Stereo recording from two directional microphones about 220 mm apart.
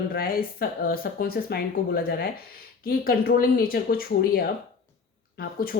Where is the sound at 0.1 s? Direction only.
45° left (ahead or behind).